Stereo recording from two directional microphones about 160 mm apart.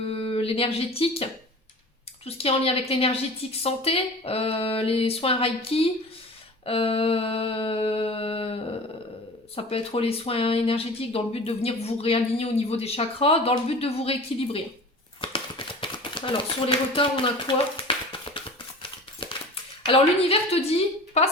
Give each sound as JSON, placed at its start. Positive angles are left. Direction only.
{"t": 0.1, "sound": "speech", "side_deg": 35}
{"t": 15.2, "sound": "a sound", "side_deg": 30}
{"t": 19.8, "sound": "speech", "side_deg": 35}